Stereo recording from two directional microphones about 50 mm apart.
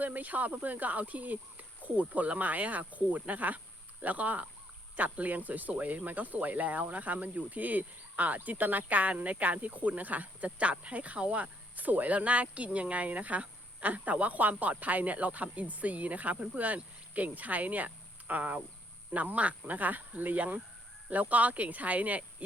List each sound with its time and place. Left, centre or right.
0.0 s cricket: right
15.5 s speech: right
19.1 s cricket: right